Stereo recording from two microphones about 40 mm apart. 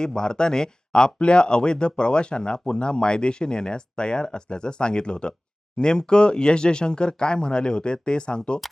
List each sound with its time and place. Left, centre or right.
0.0 s speech: centre